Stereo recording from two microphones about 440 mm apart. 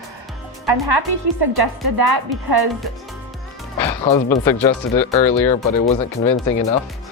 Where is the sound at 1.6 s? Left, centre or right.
Right.